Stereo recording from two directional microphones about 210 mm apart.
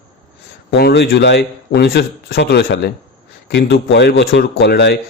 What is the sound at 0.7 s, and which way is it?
Speech, 50° left (ahead or behind).